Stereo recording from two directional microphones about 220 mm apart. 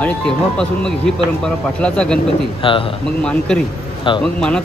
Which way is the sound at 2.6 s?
25° left (ahead or behind).